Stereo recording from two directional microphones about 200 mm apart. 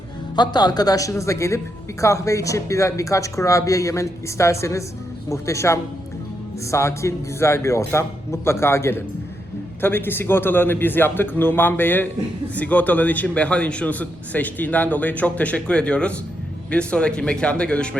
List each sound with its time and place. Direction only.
0.3 s speech: 20° left (ahead or behind); by 17.9 s 5° left (ahead or behind)